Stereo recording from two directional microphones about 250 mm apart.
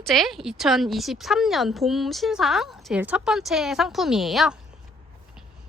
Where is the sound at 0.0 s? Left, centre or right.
Centre.